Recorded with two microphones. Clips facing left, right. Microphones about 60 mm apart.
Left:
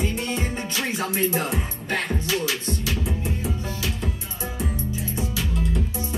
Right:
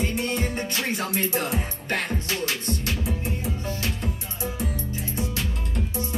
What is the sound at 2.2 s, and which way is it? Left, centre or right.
Music, right.